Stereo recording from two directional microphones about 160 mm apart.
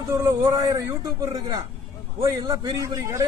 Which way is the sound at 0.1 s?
20° right (ahead or behind).